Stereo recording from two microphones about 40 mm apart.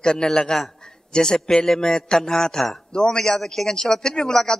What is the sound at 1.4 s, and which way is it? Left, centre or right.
A man's voice, centre.